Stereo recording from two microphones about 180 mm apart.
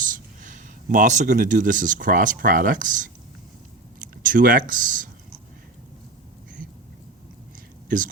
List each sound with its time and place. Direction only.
0.0 s speech: 45° right (ahead or behind)
7.9 s speech: 50° right (ahead or behind)